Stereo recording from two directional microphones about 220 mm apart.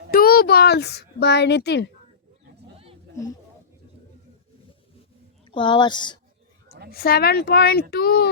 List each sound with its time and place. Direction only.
0.1 s a sound: 45° left (ahead or behind)
5.5 s a woman's voice: 20° left (ahead or behind)
6.9 s speech: 45° left (ahead or behind)